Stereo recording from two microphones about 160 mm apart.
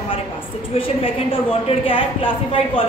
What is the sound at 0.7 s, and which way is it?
Speech, 40° left (ahead or behind).